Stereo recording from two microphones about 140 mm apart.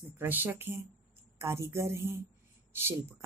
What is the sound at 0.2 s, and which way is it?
A woman's voice, 15° right (ahead or behind).